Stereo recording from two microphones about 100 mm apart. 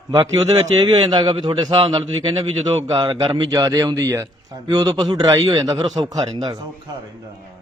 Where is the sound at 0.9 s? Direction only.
45° right (ahead or behind).